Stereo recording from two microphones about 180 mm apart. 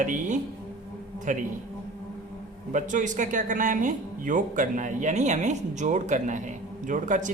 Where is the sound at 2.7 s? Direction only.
45° right (ahead or behind).